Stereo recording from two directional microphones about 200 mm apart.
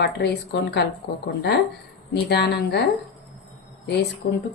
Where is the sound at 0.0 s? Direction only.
55° left (ahead or behind).